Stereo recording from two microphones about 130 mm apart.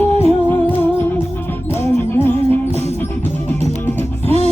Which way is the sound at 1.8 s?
15° left (ahead or behind).